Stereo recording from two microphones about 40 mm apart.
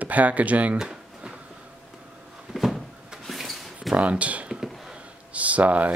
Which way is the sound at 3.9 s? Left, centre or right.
Right.